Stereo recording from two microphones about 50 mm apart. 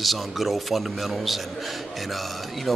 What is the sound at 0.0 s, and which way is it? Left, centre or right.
A man's voice, centre.